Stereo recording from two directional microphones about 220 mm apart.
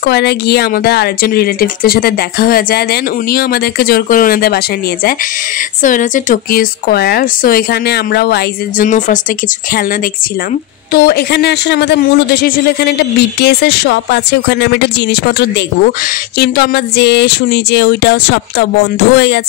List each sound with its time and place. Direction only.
0.0 s a man's voice: 50° left (ahead or behind)
5.8 s a woman's voice: 35° left (ahead or behind)
10.9 s a man's voice: 45° left (ahead or behind)